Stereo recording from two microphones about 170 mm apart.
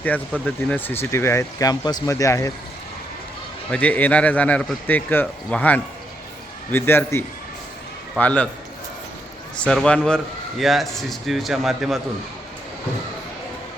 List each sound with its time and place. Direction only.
0.4 s speech: 10° left (ahead or behind)
3.7 s speech: 10° left (ahead or behind)
9.6 s a man's voice: 5° left (ahead or behind)